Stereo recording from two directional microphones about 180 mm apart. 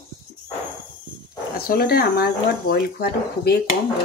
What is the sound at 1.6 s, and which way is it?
Speech, 55° left (ahead or behind).